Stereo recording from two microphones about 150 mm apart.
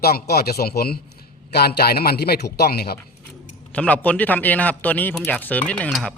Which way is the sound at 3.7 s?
10° left (ahead or behind).